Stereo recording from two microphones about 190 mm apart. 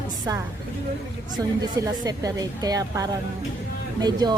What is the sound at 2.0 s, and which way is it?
A woman's voice, 20° right (ahead or behind).